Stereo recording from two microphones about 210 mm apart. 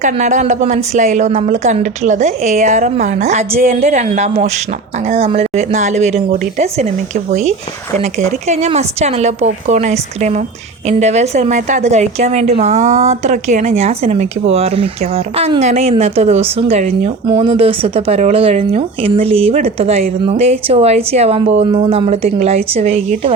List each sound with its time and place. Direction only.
0.0 s a woman's voice: 35° right (ahead or behind)